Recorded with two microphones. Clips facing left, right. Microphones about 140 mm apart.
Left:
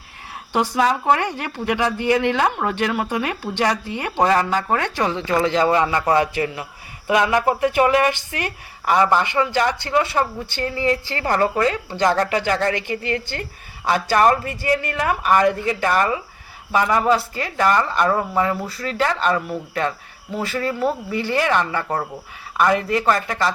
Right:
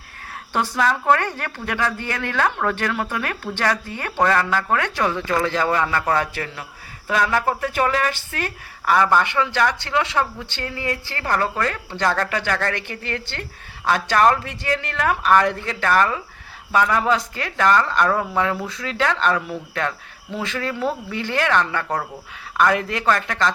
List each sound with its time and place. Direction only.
0.5 s speech: 15° left (ahead or behind)